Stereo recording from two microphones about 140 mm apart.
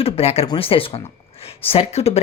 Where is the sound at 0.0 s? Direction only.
45° left (ahead or behind).